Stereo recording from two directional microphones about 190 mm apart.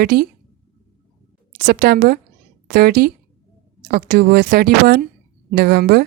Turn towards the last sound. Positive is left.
turn(degrees=-50)  # may be behind; listen again after turning